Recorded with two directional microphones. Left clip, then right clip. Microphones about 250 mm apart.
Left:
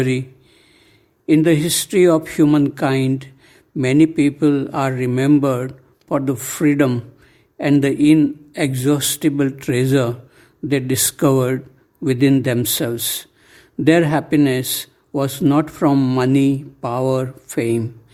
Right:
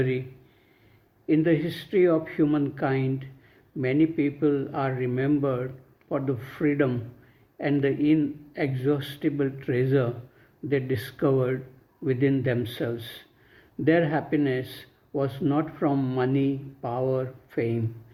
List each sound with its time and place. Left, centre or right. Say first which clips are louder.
1.3 s speech: left 8 dB; left